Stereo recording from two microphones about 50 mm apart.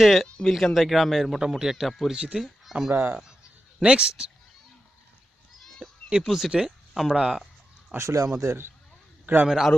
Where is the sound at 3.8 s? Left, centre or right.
Centre.